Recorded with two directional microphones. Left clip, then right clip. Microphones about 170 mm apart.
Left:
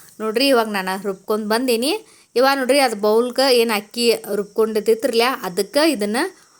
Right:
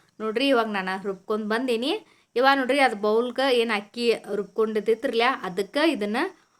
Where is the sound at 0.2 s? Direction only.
35° left (ahead or behind).